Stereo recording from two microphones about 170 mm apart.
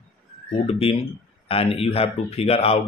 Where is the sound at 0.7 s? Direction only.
35° left (ahead or behind).